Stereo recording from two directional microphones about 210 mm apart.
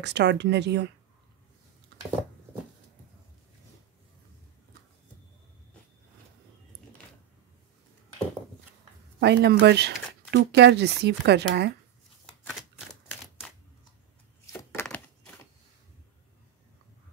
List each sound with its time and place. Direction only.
0.0 s speech: 55° right (ahead or behind)
9.2 s speech: 50° right (ahead or behind)
14.4 s a sound: 10° left (ahead or behind)